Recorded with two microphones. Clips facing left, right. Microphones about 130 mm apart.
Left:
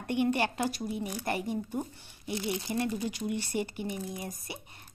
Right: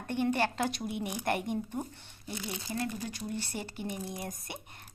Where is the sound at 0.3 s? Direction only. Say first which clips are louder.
Even; 10° left (ahead or behind).